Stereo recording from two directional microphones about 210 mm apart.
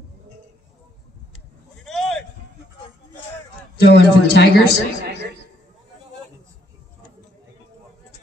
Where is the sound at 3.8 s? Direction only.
50° left (ahead or behind).